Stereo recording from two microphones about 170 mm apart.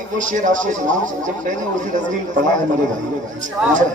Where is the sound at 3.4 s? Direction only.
50° right (ahead or behind).